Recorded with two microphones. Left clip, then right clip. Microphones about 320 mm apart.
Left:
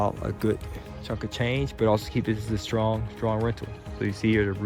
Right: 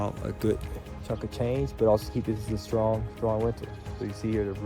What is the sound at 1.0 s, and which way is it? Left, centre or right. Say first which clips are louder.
Speech: left 1 dB; left.